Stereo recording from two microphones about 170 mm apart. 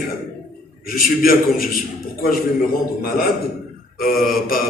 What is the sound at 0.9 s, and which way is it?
Speech, 60° left (ahead or behind).